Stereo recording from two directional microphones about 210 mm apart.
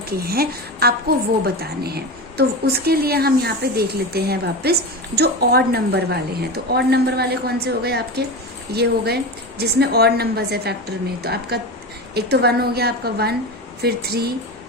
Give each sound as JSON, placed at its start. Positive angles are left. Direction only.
{"t": 0.1, "sound": "speech", "side_deg": -45}